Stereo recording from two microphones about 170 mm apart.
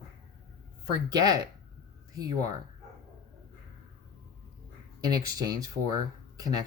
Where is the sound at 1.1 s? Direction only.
20° right (ahead or behind).